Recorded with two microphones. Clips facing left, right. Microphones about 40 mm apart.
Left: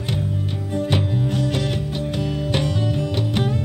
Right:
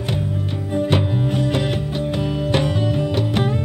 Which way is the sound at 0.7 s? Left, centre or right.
Centre.